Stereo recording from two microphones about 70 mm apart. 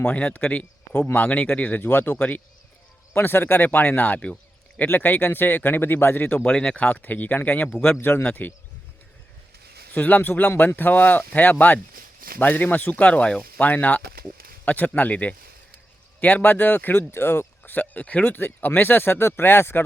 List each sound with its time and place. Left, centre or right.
0.0 s speech: centre
9.9 s speech: left